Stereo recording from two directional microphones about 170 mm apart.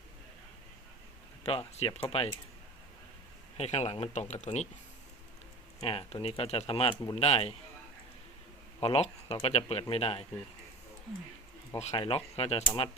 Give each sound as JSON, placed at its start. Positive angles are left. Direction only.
{"t": 1.5, "sound": "speech", "side_deg": 35}
{"t": 3.6, "sound": "speech", "side_deg": 40}
{"t": 5.8, "sound": "speech", "side_deg": 35}
{"t": 8.8, "sound": "speech", "side_deg": 35}
{"t": 11.8, "sound": "speech", "side_deg": 35}